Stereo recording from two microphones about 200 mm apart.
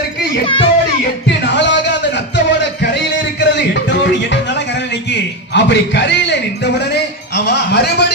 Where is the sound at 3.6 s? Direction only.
65° left (ahead or behind).